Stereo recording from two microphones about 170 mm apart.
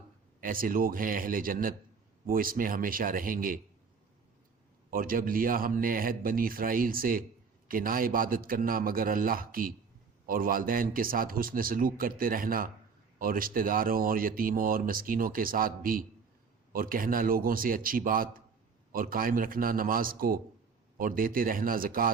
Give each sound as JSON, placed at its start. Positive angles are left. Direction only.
{"t": 0.4, "sound": "speech", "side_deg": -55}
{"t": 4.9, "sound": "speech", "side_deg": -55}